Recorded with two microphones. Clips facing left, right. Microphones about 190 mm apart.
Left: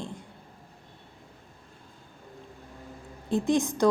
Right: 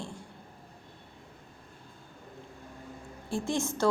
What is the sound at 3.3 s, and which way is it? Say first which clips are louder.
Speech: left 6 dB; 20° left (ahead or behind).